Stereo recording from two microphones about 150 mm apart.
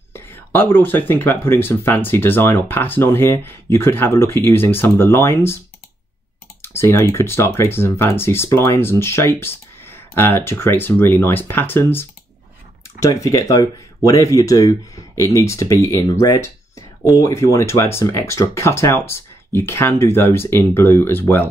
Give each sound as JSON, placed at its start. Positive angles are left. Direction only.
{"t": 0.1, "sound": "speech", "side_deg": 15}
{"t": 6.6, "sound": "speech", "side_deg": 15}